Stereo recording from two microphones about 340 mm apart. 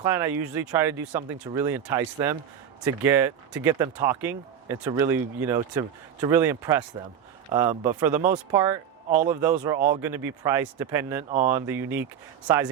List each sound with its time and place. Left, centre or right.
0.0 s speech: centre
9.4 s speech: centre